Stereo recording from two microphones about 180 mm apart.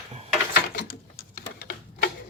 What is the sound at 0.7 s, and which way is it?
Typing, 55° left (ahead or behind).